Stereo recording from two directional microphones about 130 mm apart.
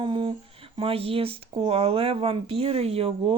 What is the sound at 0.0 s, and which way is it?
Speech, 40° right (ahead or behind).